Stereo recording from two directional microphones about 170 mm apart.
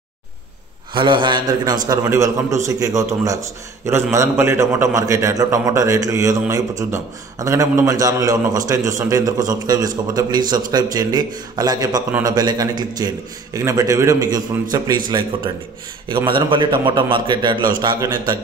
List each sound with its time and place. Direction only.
0.9 s a man's voice: 30° right (ahead or behind)